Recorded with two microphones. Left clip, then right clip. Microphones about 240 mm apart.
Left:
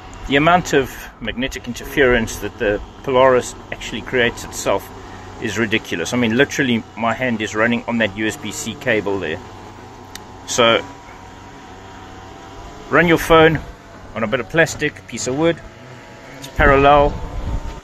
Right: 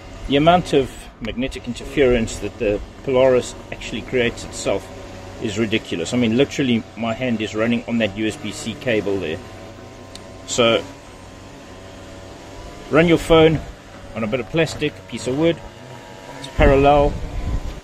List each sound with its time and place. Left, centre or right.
0.3 s speech: centre
10.5 s speech: centre
12.9 s speech: centre
16.5 s speech: centre